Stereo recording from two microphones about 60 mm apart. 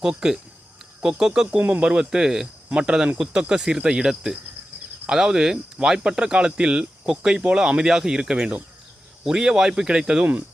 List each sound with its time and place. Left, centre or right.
0.0 s speech: centre
1.5 s speech: right
1.9 s speech: centre